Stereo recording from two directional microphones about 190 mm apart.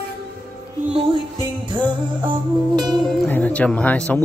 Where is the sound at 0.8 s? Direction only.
30° right (ahead or behind).